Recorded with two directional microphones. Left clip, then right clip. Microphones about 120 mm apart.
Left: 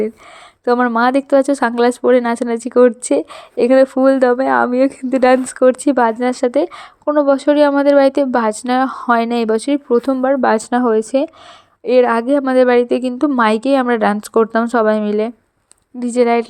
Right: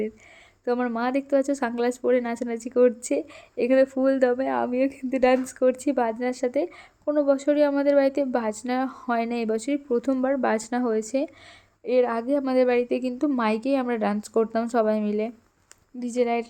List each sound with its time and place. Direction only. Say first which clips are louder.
0.6 s a woman's voice: left 12 dB; 35° left (ahead or behind)
11.9 s a woman's voice: left 10 dB; 50° left (ahead or behind)